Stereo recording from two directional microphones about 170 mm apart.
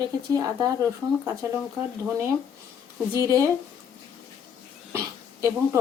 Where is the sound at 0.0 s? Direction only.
20° right (ahead or behind).